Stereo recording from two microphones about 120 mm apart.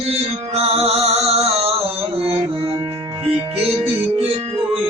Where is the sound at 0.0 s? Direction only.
60° right (ahead or behind).